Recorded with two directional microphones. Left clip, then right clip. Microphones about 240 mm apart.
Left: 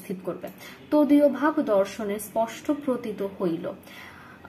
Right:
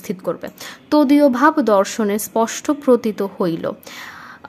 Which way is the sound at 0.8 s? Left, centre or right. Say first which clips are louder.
Right 6 dB; right.